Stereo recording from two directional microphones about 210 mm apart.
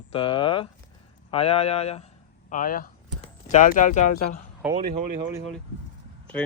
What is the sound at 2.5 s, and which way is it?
Speech, 40° left (ahead or behind).